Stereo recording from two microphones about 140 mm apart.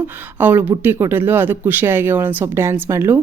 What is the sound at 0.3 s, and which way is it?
Speech, 15° right (ahead or behind).